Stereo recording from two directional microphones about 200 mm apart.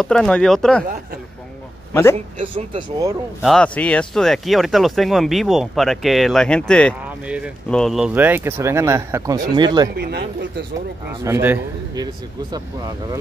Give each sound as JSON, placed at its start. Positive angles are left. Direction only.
{"t": 0.0, "sound": "speech", "side_deg": 5}
{"t": 2.1, "sound": "speech", "side_deg": -30}
{"t": 3.4, "sound": "speech", "side_deg": 5}
{"t": 7.2, "sound": "speech", "side_deg": -5}
{"t": 9.9, "sound": "a man's voice", "side_deg": -50}
{"t": 11.2, "sound": "speech", "side_deg": -10}